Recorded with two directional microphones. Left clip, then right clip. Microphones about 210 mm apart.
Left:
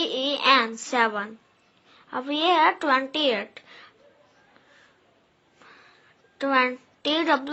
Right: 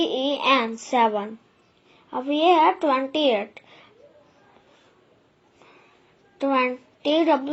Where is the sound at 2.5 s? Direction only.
90° left.